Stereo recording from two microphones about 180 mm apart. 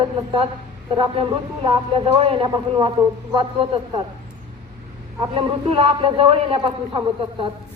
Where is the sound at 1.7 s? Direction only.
30° right (ahead or behind).